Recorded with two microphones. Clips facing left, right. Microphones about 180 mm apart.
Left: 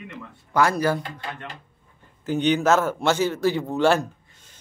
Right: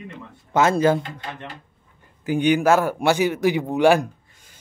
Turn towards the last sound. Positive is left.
turn(degrees=-15)  # may be behind; listen again after turning